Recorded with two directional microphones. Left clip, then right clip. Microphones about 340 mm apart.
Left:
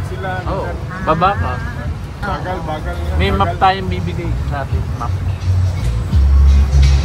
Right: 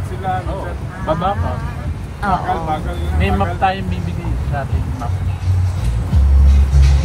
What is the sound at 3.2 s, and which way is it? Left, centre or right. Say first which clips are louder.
Speech: left 3 dB; left.